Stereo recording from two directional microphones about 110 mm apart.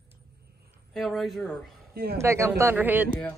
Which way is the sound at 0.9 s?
Centre (ahead or behind).